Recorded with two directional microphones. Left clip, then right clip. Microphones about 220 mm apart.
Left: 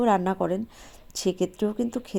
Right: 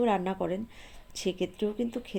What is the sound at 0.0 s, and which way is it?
Speech, 25° left (ahead or behind).